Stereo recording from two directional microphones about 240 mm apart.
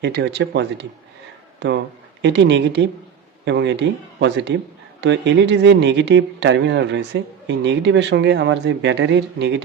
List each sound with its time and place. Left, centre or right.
0.0 s speech: right